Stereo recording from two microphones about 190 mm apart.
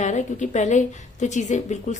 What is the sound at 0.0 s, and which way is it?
A woman's voice, 40° left (ahead or behind).